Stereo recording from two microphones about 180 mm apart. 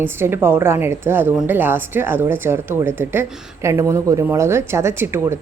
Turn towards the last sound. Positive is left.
turn(degrees=-15)  # may be behind; listen again after turning